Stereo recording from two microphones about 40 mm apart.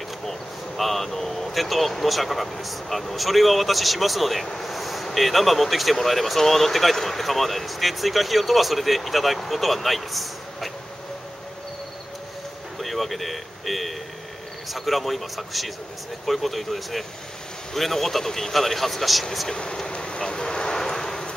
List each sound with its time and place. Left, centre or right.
0.2 s speech: centre
12.7 s speech: centre
19.5 s vehicle: left